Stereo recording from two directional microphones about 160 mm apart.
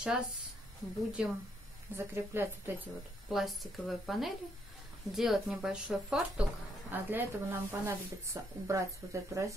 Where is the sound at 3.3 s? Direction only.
Centre (ahead or behind).